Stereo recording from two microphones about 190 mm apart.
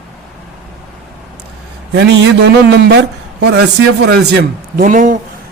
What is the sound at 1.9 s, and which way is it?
A man's voice, 60° right (ahead or behind).